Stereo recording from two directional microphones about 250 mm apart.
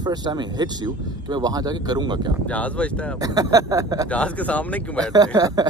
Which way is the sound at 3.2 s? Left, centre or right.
Centre.